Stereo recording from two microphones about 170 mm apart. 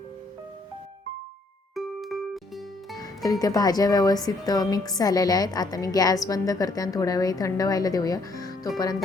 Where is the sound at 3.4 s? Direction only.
20° left (ahead or behind).